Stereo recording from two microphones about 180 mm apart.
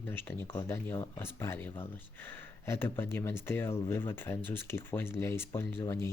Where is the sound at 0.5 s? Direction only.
15° left (ahead or behind).